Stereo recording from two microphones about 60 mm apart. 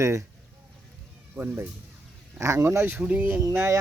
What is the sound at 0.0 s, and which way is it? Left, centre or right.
Speech, right.